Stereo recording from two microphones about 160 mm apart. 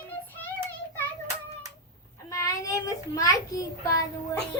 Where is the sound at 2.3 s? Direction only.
20° left (ahead or behind).